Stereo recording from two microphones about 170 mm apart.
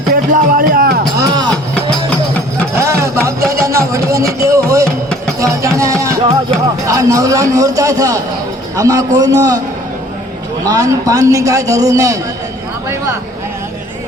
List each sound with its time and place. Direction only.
0.1 s a sound: 55° right (ahead or behind)
1.2 s music: 25° right (ahead or behind)
2.7 s music: 15° right (ahead or behind)
6.8 s a man's voice: 20° right (ahead or behind)
10.7 s a man's voice: 20° right (ahead or behind)